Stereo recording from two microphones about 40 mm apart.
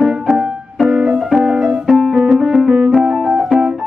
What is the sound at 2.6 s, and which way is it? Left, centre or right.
Music, centre.